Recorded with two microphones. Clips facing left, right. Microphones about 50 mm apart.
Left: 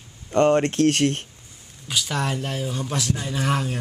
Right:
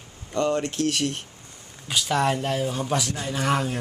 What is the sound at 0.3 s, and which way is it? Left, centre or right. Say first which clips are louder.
Speech: left 6 dB; left.